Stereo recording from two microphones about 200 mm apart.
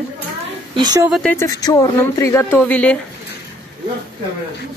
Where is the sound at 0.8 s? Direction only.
20° right (ahead or behind).